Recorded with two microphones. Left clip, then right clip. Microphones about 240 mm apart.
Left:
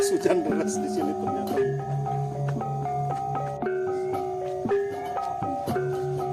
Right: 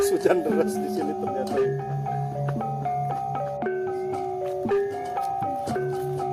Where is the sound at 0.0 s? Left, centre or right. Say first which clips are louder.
Right 2 dB; left.